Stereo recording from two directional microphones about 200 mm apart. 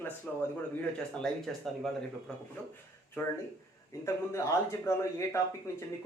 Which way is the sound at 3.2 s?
10° left (ahead or behind).